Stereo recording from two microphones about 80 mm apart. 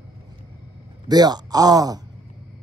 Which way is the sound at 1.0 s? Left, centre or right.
Right.